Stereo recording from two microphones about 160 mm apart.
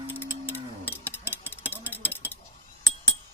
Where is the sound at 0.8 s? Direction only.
10° left (ahead or behind).